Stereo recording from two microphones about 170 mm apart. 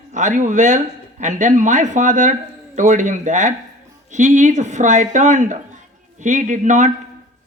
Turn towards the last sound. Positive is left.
turn(degrees=-45)  # may be behind; listen again after turning